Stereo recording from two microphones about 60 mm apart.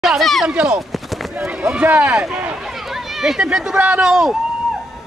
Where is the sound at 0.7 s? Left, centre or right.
Centre.